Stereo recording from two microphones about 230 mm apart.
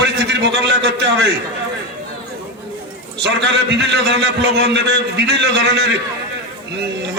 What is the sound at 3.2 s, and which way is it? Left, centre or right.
A man's voice, right.